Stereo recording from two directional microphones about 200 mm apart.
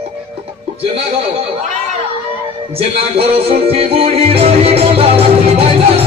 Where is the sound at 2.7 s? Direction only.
30° right (ahead or behind).